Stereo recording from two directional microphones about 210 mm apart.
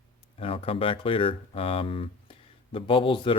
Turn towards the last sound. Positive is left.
turn(degrees=25)  # may be behind; listen again after turning